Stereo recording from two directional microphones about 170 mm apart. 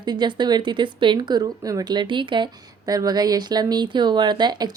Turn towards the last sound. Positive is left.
turn(degrees=-25)  # may be behind; listen again after turning